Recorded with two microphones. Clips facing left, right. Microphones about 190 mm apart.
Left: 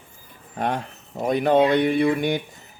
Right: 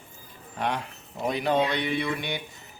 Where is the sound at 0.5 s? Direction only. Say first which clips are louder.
Left 4 dB; 45° left (ahead or behind).